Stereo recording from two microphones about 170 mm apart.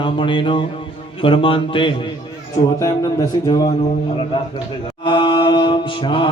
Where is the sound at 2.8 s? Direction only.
20° left (ahead or behind).